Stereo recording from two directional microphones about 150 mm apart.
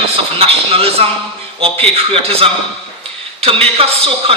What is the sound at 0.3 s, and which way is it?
A man's voice, 40° right (ahead or behind).